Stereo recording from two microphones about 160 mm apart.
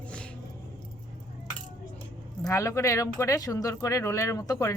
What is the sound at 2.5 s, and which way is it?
Speech, 20° left (ahead or behind).